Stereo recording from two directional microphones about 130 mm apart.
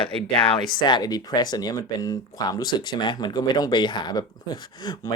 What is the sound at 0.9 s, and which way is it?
Speech, 35° left (ahead or behind).